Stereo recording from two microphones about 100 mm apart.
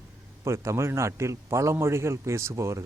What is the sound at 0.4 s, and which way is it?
Speech, 30° right (ahead or behind).